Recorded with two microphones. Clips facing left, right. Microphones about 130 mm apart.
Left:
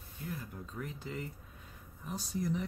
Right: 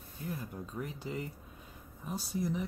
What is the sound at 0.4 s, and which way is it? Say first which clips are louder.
Speech: right 3 dB; 20° right (ahead or behind).